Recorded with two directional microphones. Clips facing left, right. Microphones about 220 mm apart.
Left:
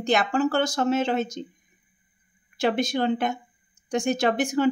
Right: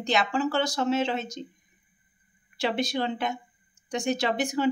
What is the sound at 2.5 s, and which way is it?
Speech, 50° left (ahead or behind).